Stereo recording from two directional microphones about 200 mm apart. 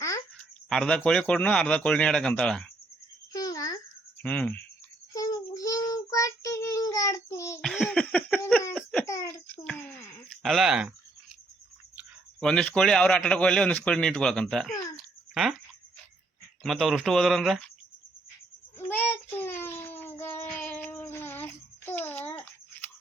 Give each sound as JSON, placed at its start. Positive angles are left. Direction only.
{"t": 0.7, "sound": "speech", "side_deg": 5}
{"t": 3.3, "sound": "babbling", "side_deg": 20}
{"t": 4.2, "sound": "speech", "side_deg": 5}
{"t": 5.1, "sound": "child singing", "side_deg": 20}
{"t": 7.6, "sound": "laughter", "side_deg": 0}
{"t": 9.0, "sound": "a sound", "side_deg": 15}
{"t": 10.4, "sound": "speech", "side_deg": 0}
{"t": 11.9, "sound": "speech", "side_deg": 5}
{"t": 16.6, "sound": "speech", "side_deg": 0}
{"t": 18.9, "sound": "child singing", "side_deg": 10}